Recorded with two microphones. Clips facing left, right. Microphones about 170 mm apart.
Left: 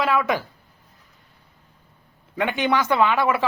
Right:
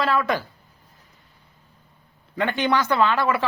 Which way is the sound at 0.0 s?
10° left (ahead or behind).